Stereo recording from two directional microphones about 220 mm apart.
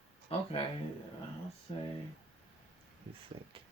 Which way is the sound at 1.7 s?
30° left (ahead or behind).